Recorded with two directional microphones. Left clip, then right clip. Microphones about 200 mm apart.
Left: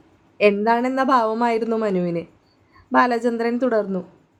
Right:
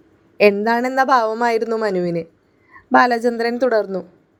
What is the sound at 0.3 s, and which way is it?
A woman's voice, 20° right (ahead or behind).